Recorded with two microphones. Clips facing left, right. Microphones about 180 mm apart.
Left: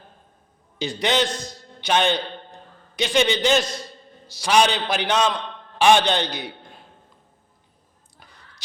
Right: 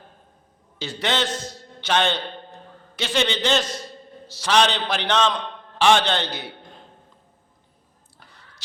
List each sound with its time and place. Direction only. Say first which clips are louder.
0.8 s a man's voice: left 3 dB; 15° left (ahead or behind)